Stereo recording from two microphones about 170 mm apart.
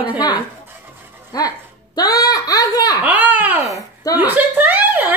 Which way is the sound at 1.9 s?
20° left (ahead or behind).